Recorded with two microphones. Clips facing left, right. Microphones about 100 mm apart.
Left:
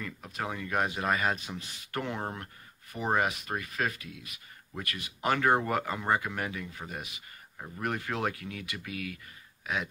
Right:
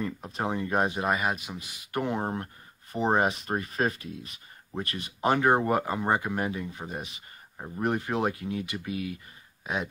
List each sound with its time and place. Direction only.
0.0 s speech: 30° right (ahead or behind)